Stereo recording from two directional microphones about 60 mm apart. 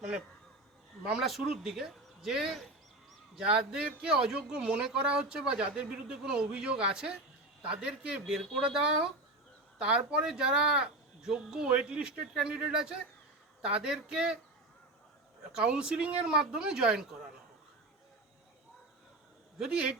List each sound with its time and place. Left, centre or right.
1.1 s speech: centre
3.4 s speech: centre
15.5 s speech: centre
19.5 s speech: centre